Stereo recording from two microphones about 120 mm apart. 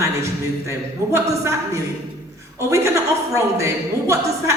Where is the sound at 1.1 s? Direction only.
25° right (ahead or behind).